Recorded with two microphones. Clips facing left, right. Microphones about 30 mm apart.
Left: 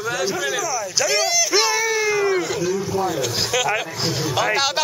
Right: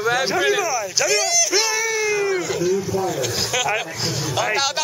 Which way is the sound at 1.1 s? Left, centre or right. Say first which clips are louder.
Left 1 dB; centre.